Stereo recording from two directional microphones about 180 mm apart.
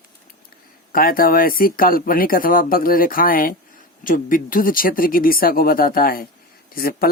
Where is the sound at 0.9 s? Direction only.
55° left (ahead or behind).